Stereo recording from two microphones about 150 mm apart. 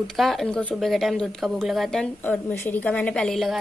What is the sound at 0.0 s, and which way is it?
A woman's voice, centre (ahead or behind).